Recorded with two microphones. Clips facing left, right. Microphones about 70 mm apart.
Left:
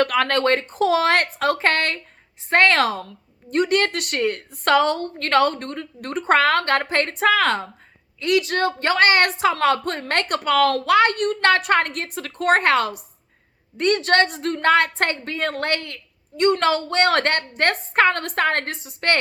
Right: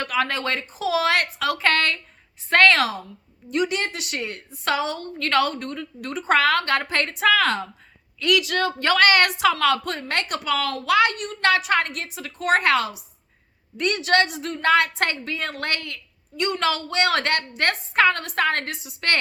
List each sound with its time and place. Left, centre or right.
0.0 s a woman's voice: left
2.7 s a woman's voice: left